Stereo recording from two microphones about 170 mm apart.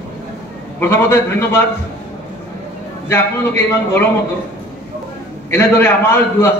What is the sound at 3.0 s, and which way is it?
A man's voice, 15° left (ahead or behind).